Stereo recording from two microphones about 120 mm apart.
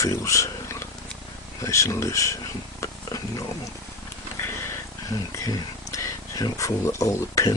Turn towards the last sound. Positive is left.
turn(degrees=25)  # may be behind; listen again after turning